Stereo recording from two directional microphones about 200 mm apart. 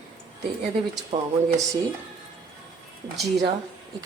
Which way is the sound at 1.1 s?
25° right (ahead or behind).